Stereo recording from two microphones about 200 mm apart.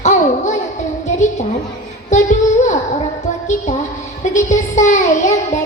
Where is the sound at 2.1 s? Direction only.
35° left (ahead or behind).